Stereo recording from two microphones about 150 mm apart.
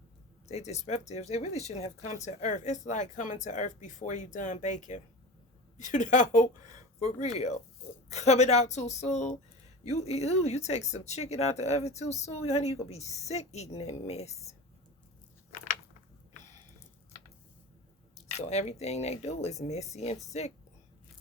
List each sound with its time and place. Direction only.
0.4 s speech: 45° left (ahead or behind)
18.4 s speech: 45° left (ahead or behind)